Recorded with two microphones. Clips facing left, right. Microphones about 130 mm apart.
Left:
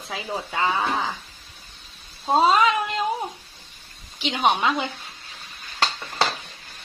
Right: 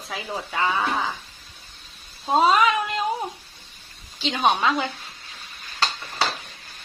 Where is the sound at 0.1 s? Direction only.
25° left (ahead or behind).